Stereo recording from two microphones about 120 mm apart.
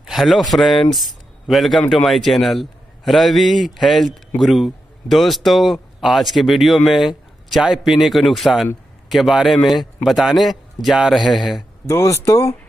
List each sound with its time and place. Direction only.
0.0 s a man's voice: centre (ahead or behind)
11.9 s speech: 25° left (ahead or behind)